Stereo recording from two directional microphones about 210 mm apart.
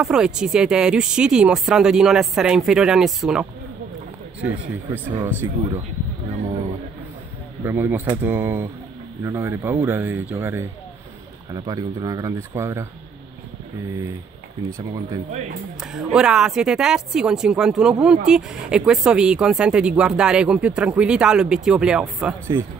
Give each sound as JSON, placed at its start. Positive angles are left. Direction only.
{"t": 0.0, "sound": "speech", "side_deg": -5}
{"t": 5.1, "sound": "speech", "side_deg": -10}
{"t": 7.6, "sound": "speech", "side_deg": -10}
{"t": 15.8, "sound": "speech", "side_deg": -5}